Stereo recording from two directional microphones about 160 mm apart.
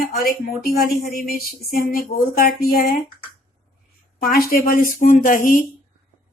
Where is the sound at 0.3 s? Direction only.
65° left (ahead or behind).